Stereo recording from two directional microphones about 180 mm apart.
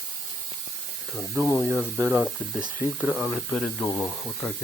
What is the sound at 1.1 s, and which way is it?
Speech, centre (ahead or behind).